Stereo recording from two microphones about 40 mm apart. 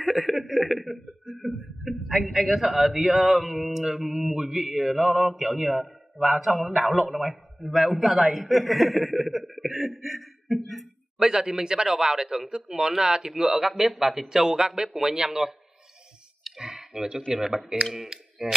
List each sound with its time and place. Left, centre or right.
0.1 s a man's voice: centre
11.2 s a man's voice: centre
14.7 s a man's voice: centre
16.4 s clicking: centre
17.3 s a man's voice: centre